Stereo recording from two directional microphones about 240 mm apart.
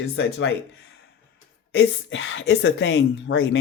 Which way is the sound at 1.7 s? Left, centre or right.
Left.